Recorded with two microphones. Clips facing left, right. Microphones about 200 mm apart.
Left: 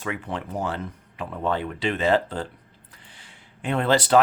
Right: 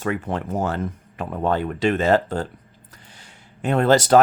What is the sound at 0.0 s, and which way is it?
Speech, 45° right (ahead or behind).